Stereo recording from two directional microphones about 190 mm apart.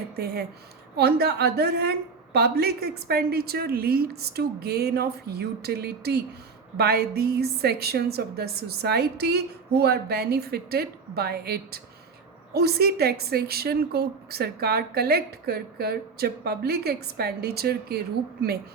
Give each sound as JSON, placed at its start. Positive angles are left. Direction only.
{"t": 0.2, "sound": "a woman's voice", "side_deg": -55}